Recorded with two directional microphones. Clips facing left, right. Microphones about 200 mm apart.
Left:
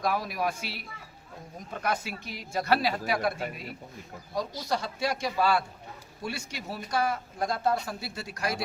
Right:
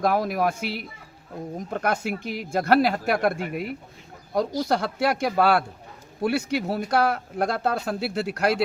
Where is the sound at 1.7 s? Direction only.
50° right (ahead or behind).